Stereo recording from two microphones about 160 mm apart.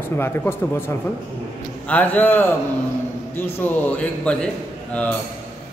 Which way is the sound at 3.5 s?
10° left (ahead or behind).